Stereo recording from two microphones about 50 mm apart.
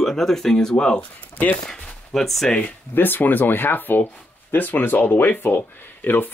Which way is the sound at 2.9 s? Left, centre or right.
Left.